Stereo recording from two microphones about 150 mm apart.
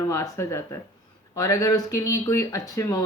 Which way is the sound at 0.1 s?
20° left (ahead or behind).